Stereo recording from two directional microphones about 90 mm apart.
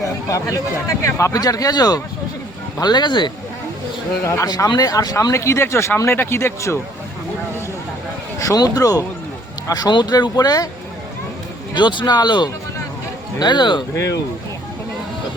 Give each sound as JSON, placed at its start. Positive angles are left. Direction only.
{"t": 0.3, "sound": "speech", "side_deg": 40}
{"t": 4.2, "sound": "speech", "side_deg": 35}
{"t": 4.4, "sound": "speech", "side_deg": 50}
{"t": 5.3, "sound": "speech", "side_deg": 30}
{"t": 8.4, "sound": "speech", "side_deg": 40}
{"t": 11.7, "sound": "speech", "side_deg": 60}